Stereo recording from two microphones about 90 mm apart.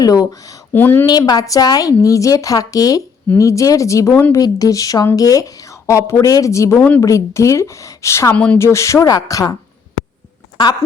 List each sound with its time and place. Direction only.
0.0 s a woman's voice: 40° left (ahead or behind)
0.7 s speech: 20° left (ahead or behind)
1.0 s a woman's voice: 45° left (ahead or behind)
8.3 s speech: 15° left (ahead or behind)
8.5 s a woman's voice: 30° left (ahead or behind)